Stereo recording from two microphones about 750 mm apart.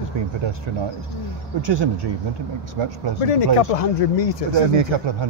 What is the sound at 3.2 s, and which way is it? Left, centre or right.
Speech, left.